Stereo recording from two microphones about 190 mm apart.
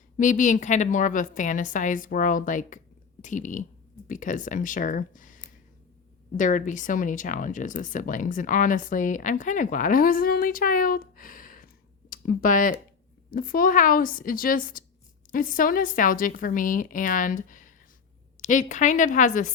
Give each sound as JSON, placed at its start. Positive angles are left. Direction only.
{"t": 0.2, "sound": "a woman's voice", "side_deg": 40}